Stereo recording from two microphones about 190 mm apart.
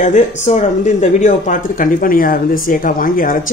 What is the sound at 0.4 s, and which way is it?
Speech, 40° left (ahead or behind).